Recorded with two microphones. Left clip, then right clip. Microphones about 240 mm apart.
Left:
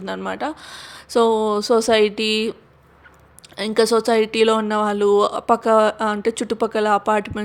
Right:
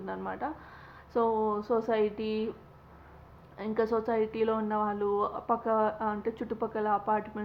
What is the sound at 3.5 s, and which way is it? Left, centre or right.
Speech, left.